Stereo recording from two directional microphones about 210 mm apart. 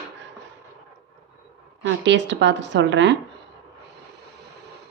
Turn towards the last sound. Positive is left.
turn(degrees=-60)  # may be behind; listen again after turning